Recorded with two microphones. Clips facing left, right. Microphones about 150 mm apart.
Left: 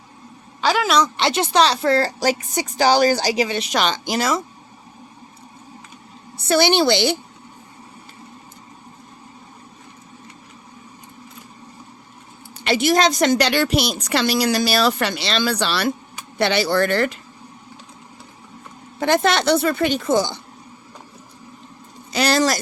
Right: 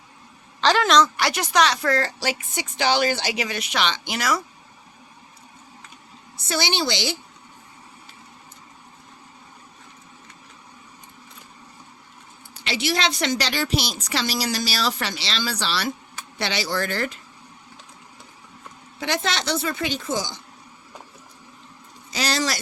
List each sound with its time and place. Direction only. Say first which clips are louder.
0.6 s a woman's voice: even; 10° left (ahead or behind)
1.1 s a woman's voice: left 4 dB; 25° left (ahead or behind)
2.1 s speech: left 7 dB; 40° left (ahead or behind)
3.8 s speech: left 4 dB; 45° left (ahead or behind)
4.2 s a woman's voice: left 3 dB; 25° left (ahead or behind)
6.5 s a woman's voice: left 9 dB; 55° left (ahead or behind)
12.6 s a woman's voice: left 8 dB; 50° left (ahead or behind); by 17.2 s 70° left (ahead or behind)
18.9 s a woman's voice: left 8 dB; 50° left (ahead or behind)
22.1 s speech: left 7 dB; 60° left (ahead or behind)